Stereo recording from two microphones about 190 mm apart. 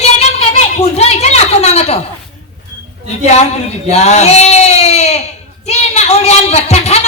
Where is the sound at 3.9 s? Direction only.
35° left (ahead or behind).